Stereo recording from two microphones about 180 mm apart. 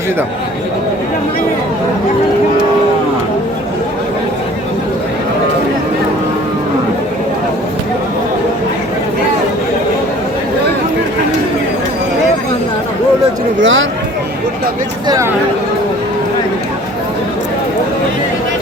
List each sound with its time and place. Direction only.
13.6 s speech: 90° right
15.0 s speech: 20° right (ahead or behind)